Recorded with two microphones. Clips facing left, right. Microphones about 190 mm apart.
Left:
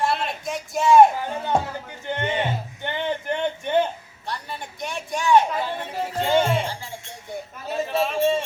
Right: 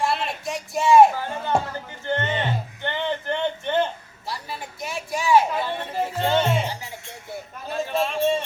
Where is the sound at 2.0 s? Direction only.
15° left (ahead or behind).